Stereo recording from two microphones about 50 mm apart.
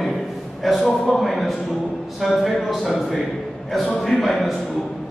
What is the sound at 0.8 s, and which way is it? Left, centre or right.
Speech, left.